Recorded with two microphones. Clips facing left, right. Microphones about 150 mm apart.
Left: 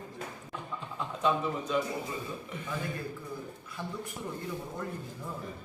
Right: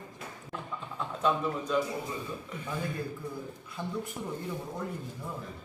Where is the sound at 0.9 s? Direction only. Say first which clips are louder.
Even; centre (ahead or behind).